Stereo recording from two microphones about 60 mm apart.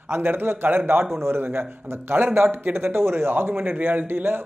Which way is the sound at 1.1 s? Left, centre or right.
Right.